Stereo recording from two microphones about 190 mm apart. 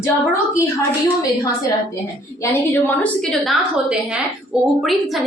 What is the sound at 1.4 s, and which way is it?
A woman's voice, 20° left (ahead or behind).